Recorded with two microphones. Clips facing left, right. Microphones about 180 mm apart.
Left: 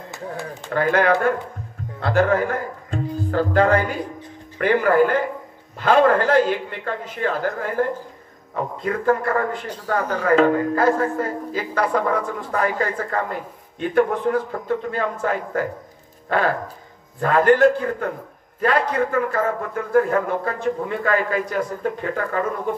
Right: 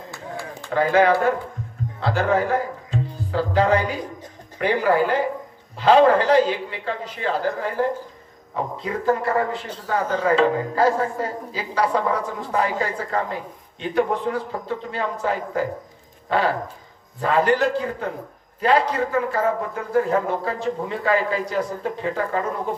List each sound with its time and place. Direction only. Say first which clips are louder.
0.7 s a man's voice: right 1 dB; 55° left (ahead or behind)
8.8 s a woman's voice: left 2 dB; 55° left (ahead or behind)